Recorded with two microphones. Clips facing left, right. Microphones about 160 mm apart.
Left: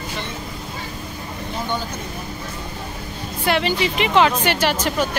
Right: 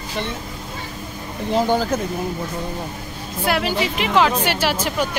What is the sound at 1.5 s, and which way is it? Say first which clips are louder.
Speech: right 9 dB; 90° right.